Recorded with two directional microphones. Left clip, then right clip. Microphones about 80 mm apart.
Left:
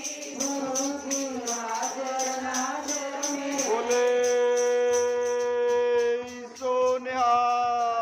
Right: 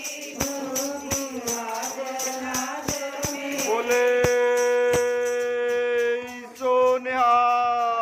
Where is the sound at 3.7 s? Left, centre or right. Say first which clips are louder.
Right 3 dB; right.